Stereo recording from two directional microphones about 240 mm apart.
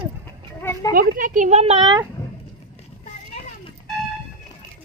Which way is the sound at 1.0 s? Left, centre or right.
Right.